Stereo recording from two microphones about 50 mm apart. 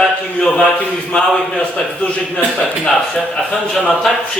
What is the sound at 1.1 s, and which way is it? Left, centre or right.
Speech, centre.